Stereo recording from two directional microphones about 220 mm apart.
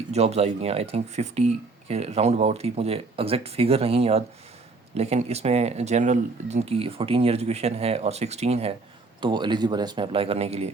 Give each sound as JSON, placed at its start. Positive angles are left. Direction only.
{"t": 0.1, "sound": "speech", "side_deg": -30}